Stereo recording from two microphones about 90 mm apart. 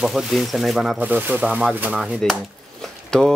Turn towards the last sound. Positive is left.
turn(degrees=5)  # may be behind; listen again after turning